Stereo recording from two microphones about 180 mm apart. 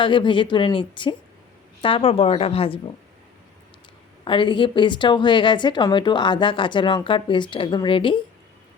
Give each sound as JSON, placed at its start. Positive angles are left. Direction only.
{"t": 0.0, "sound": "a woman's voice", "side_deg": 25}
{"t": 4.2, "sound": "a woman's voice", "side_deg": 25}